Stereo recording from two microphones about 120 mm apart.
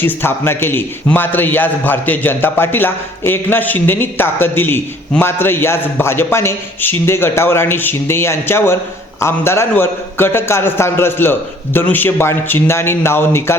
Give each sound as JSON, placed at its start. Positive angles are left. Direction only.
{"t": 0.0, "sound": "a man's voice", "side_deg": 20}